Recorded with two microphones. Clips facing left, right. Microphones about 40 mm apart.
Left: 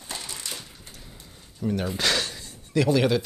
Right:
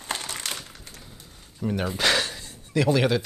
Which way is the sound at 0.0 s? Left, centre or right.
Right.